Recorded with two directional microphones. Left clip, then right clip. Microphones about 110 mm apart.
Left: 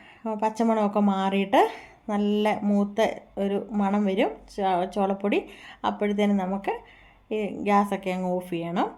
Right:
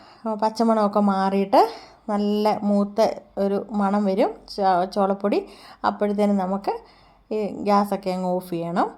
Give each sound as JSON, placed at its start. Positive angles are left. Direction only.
{"t": 0.2, "sound": "speech", "side_deg": -30}